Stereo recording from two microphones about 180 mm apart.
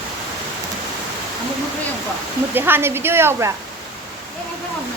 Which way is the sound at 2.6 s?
10° right (ahead or behind).